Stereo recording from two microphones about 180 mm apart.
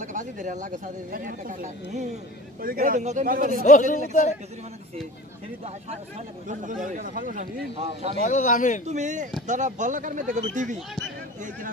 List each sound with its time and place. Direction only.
0.0 s speech: 45° right (ahead or behind)
3.6 s speech: 45° left (ahead or behind)
5.9 s speech: 40° right (ahead or behind)
7.7 s speech: 35° right (ahead or behind)
8.2 s speech: 45° left (ahead or behind)
8.8 s speech: 40° right (ahead or behind)